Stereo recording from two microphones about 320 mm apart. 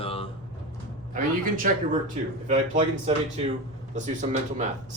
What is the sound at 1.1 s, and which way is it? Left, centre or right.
Speech, right.